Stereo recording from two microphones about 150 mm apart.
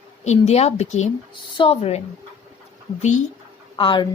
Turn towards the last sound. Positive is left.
turn(degrees=35)  # may be behind; listen again after turning